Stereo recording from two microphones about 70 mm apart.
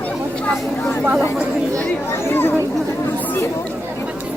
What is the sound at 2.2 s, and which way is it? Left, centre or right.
Speech, left.